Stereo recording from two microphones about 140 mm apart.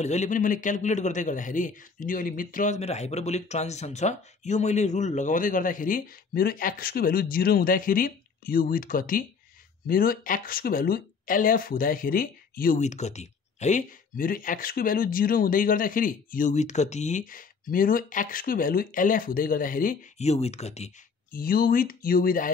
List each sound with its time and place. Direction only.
0.0 s a man's voice: 55° left (ahead or behind); by 12.8 s 90° left
12.8 s speech: 55° left (ahead or behind); by 20.1 s 75° left (ahead or behind)
20.2 s speech: 50° left (ahead or behind)
21.3 s speech: 90° left